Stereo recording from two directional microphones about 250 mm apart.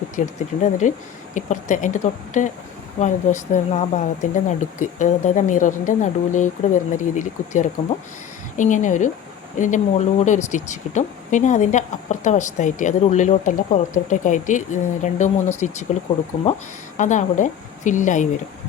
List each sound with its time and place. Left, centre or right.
0.2 s speech: left
17.0 s speech: left